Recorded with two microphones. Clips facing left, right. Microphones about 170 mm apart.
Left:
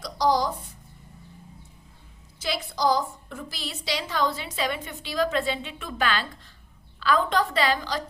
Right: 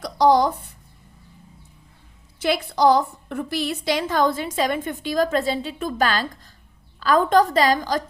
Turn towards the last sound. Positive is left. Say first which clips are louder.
# right 6 dB
turn(degrees=-45)  # may be behind; listen again after turning